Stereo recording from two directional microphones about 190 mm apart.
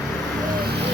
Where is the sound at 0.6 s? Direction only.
60° right (ahead or behind).